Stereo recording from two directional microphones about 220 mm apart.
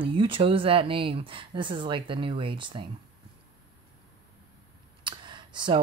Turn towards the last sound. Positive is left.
turn(degrees=-20)  # may be behind; listen again after turning